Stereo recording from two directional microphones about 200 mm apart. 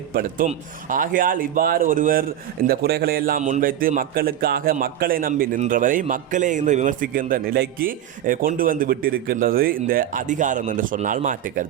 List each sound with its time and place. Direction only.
0.1 s a man's voice: 50° right (ahead or behind)